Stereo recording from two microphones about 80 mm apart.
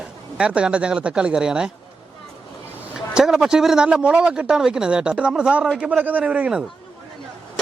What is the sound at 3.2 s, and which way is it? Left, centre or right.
Speech, centre.